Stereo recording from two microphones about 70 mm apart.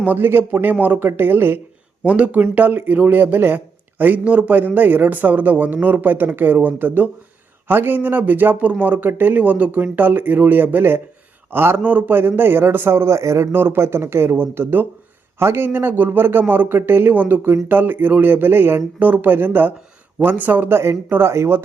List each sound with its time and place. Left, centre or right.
0.0 s speech: right
2.0 s speech: centre; by 11.8 s right
11.8 s speech: right
18.9 s speech: right